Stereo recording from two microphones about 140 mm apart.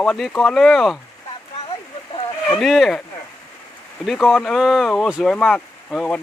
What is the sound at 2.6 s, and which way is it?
Speech, centre (ahead or behind).